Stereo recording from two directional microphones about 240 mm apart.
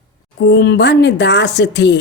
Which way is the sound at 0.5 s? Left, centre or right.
Left.